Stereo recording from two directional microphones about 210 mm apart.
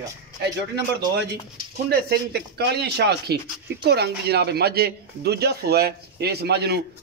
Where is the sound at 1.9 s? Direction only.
50° right (ahead or behind).